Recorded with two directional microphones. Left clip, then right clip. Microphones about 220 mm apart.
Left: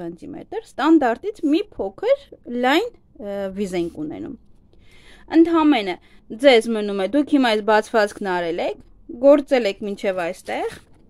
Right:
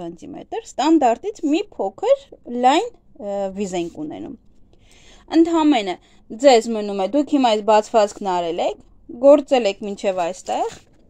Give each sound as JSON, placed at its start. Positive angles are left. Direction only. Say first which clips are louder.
{"t": 0.2, "sound": "speech", "louder": "right 1 dB", "side_deg": 5}
{"t": 5.3, "sound": "a woman's voice", "louder": "even", "side_deg": 0}